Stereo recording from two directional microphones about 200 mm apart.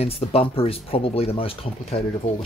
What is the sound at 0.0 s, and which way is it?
Speech, 30° left (ahead or behind).